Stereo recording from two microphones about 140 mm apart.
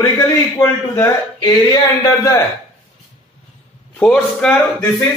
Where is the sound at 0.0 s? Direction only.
20° left (ahead or behind).